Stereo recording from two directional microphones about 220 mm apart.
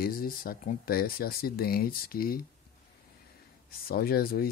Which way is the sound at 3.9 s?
45° left (ahead or behind).